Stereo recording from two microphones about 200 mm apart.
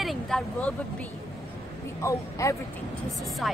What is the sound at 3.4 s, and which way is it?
Speech, centre (ahead or behind).